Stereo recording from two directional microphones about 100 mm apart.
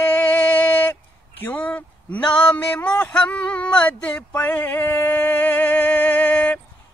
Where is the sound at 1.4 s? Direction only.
15° left (ahead or behind).